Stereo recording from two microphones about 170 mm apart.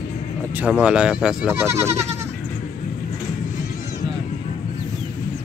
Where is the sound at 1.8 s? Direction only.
15° right (ahead or behind).